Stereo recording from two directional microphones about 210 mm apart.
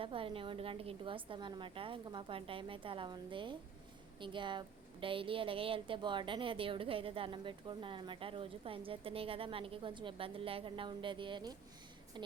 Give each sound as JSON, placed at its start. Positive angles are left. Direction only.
{"t": 0.0, "sound": "a woman's voice", "side_deg": -25}